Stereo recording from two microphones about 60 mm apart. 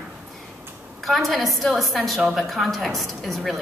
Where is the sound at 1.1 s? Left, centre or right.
Centre.